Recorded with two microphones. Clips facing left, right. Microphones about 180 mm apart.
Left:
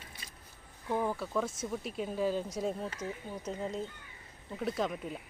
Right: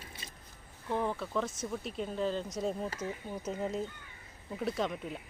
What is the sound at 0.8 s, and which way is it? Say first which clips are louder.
Speech: left 1 dB; 5° left (ahead or behind).